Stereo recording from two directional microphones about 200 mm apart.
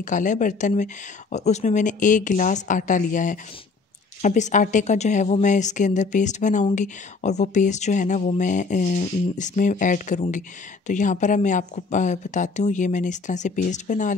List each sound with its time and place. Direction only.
0.0 s speech: 40° left (ahead or behind)